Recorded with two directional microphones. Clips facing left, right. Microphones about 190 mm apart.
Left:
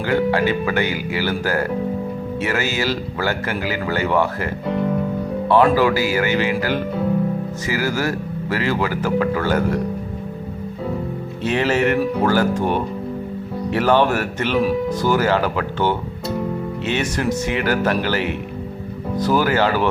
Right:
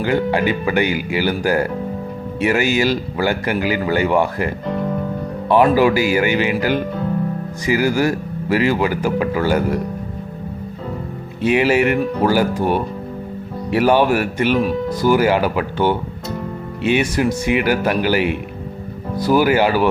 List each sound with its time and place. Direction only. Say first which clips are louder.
0.0 s speech: right 1 dB; 15° right (ahead or behind)
11.4 s speech: right 3 dB; 10° right (ahead or behind)
14.6 s speech: even; centre (ahead or behind)
15.0 s speech: right 5 dB; 10° right (ahead or behind)